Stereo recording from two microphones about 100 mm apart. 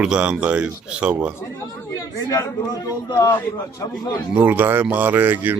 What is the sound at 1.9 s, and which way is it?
Speech, 35° left (ahead or behind).